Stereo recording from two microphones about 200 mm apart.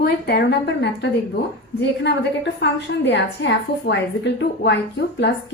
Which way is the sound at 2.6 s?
60° left (ahead or behind).